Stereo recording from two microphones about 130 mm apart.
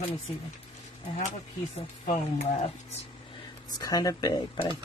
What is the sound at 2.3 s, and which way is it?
Speech, 55° left (ahead or behind).